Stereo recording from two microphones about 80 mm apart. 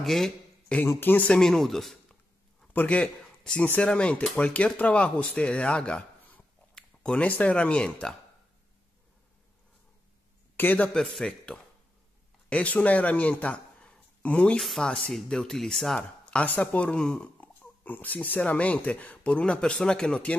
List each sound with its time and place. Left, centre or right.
0.0 s speech: centre
0.8 s speech: left; by 2.0 s centre
2.7 s speech: centre
10.5 s speech: left
10.9 s speech: centre
14.6 s speech: centre
14.9 s speech: centre